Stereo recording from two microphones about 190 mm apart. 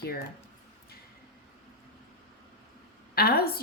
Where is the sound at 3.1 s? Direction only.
55° left (ahead or behind).